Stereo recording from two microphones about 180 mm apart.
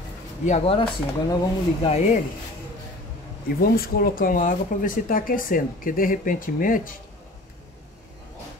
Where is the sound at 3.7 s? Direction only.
55° left (ahead or behind).